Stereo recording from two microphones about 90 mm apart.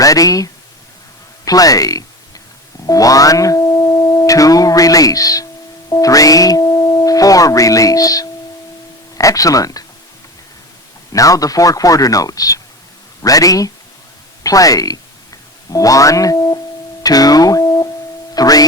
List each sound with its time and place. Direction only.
0.0 s a man's voice: 40° left (ahead or behind)
11.1 s a man's voice: 40° left (ahead or behind)
17.0 s music: 45° left (ahead or behind)